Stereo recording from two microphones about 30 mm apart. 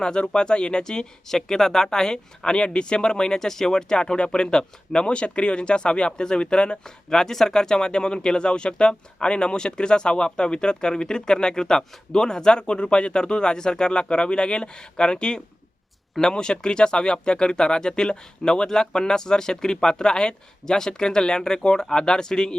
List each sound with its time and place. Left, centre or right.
0.0 s speech: left
6.8 s speech: centre